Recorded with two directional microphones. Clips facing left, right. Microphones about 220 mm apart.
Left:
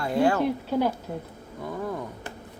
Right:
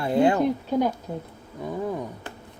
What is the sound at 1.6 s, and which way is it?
Speech, 15° right (ahead or behind).